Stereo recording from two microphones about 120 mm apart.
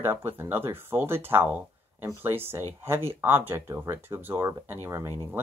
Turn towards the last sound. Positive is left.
turn(degrees=-20)  # may be behind; listen again after turning